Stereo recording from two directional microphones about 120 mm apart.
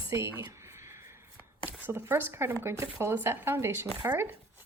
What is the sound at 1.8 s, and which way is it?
Speech, 15° right (ahead or behind).